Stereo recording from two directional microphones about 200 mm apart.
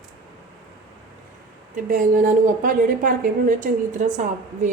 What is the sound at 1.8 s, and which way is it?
A woman's voice, 40° right (ahead or behind).